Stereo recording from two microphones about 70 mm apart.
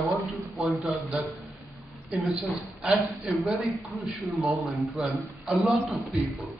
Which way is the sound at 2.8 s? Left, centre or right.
Centre.